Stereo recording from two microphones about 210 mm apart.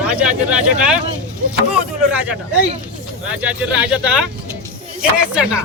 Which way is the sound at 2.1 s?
5° right (ahead or behind).